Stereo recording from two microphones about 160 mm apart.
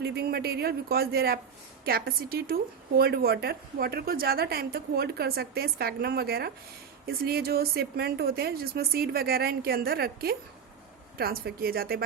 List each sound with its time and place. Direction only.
0.0 s a woman's voice: 80° right